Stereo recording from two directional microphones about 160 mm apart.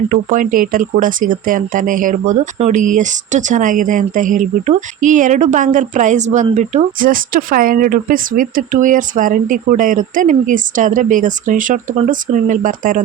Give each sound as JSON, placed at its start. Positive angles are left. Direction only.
{"t": 0.1, "sound": "speech", "side_deg": -55}